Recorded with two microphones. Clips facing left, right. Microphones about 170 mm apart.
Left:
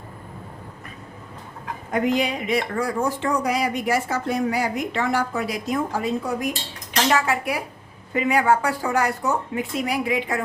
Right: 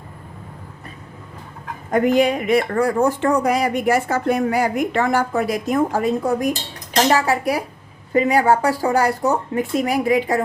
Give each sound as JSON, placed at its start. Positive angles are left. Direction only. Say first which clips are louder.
{"t": 1.9, "sound": "speech", "louder": "right 6 dB", "side_deg": -50}